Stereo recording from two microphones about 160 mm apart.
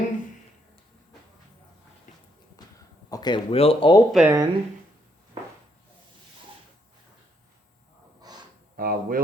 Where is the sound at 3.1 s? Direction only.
30° left (ahead or behind).